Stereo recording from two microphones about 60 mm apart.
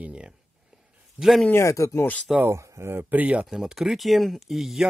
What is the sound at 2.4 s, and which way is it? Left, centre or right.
Speech, right.